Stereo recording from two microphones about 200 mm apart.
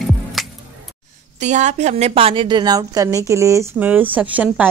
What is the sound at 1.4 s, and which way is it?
A woman's voice, 35° right (ahead or behind).